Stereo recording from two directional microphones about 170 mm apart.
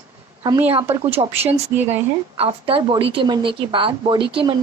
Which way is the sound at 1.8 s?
10° right (ahead or behind).